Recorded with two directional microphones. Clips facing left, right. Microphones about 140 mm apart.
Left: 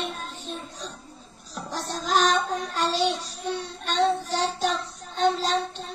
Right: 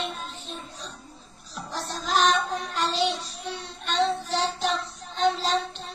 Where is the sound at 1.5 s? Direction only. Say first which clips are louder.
Left 2 dB; 45° left (ahead or behind).